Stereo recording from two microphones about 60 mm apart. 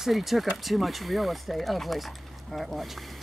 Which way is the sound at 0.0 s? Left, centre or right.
Centre.